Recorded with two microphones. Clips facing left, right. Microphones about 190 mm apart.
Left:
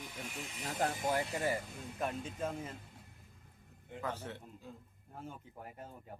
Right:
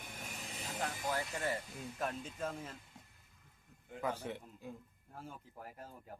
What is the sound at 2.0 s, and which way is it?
Speech, 5° left (ahead or behind).